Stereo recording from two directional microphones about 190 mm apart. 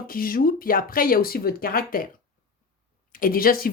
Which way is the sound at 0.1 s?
50° left (ahead or behind).